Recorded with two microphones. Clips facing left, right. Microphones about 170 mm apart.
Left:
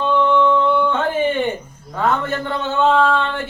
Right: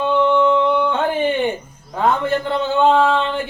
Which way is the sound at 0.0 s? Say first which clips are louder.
Right 1 dB; 15° right (ahead or behind).